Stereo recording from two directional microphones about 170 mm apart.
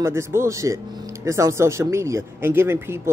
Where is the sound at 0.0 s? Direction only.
15° right (ahead or behind).